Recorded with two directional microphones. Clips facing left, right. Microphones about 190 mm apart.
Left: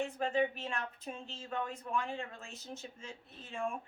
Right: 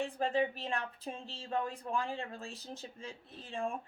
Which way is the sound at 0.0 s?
35° right (ahead or behind).